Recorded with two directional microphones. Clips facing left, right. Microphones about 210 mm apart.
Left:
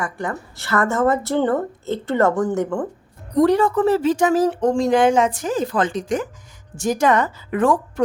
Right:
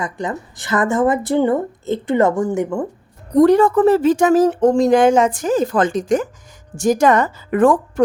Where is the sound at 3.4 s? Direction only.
50° right (ahead or behind).